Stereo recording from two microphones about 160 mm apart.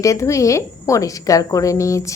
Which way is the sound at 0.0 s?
20° left (ahead or behind).